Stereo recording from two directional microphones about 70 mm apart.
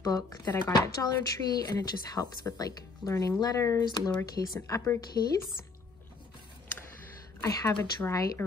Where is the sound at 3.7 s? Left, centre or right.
Left.